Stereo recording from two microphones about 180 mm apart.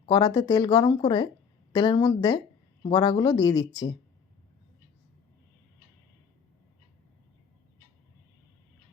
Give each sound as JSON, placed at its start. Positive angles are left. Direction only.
{"t": 0.0, "sound": "speech", "side_deg": 25}